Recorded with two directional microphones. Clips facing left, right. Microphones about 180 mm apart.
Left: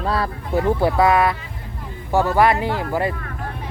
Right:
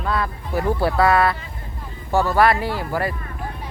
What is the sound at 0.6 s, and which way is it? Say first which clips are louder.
Speech: left 2 dB; 20° left (ahead or behind).